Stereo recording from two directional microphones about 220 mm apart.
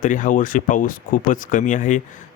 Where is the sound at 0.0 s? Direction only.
35° left (ahead or behind).